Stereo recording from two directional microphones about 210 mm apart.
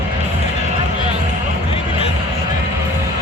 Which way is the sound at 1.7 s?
25° left (ahead or behind).